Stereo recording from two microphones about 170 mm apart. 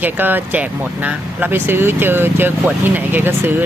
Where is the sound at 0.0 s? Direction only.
10° right (ahead or behind).